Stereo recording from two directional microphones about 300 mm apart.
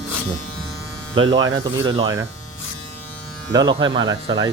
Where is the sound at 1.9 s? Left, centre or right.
Centre.